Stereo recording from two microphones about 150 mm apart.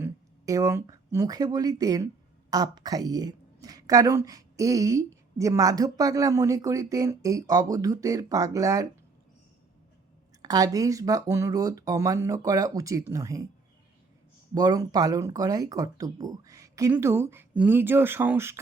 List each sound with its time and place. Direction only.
0.0 s speech: 20° right (ahead or behind)
10.4 s speech: 25° right (ahead or behind)
14.5 s speech: 25° right (ahead or behind)